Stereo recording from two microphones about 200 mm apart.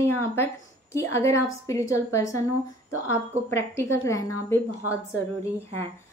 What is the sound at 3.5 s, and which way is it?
Speech, 15° left (ahead or behind).